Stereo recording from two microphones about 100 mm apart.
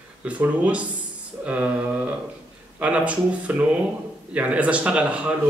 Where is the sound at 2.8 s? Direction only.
15° right (ahead or behind).